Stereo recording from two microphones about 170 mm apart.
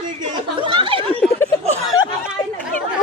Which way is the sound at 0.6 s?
30° right (ahead or behind).